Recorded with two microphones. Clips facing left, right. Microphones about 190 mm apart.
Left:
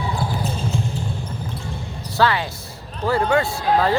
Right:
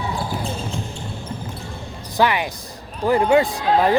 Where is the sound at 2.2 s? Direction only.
15° right (ahead or behind).